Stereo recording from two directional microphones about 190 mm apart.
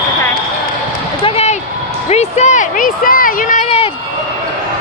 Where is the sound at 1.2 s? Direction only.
35° left (ahead or behind).